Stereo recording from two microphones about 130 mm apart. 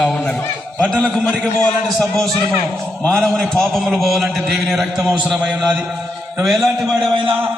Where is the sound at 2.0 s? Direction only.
5° left (ahead or behind).